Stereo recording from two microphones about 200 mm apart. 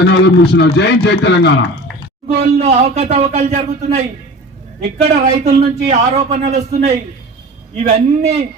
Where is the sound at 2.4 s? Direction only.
35° right (ahead or behind).